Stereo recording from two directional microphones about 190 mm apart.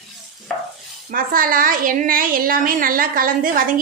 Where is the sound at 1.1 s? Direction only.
50° right (ahead or behind).